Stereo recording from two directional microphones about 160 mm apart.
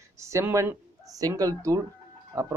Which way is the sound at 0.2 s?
20° right (ahead or behind).